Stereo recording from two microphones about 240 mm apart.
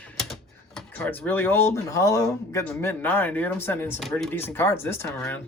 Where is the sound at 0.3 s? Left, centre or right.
Centre.